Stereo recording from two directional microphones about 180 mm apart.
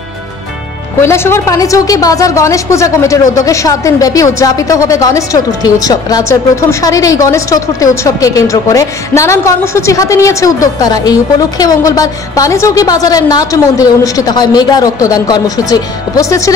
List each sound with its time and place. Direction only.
1.0 s a woman's voice: 15° left (ahead or behind)